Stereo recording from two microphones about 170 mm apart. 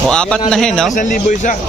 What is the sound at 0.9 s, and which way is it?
Speech, 50° left (ahead or behind).